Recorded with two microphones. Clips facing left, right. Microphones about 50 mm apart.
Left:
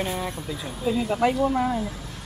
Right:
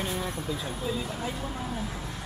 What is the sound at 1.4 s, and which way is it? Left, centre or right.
Speech, left.